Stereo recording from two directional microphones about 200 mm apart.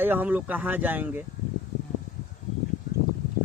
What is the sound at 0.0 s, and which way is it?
Speech, 10° right (ahead or behind).